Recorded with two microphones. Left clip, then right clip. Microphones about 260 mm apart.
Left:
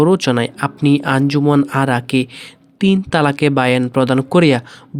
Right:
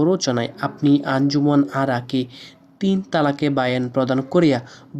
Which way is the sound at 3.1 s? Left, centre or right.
Left.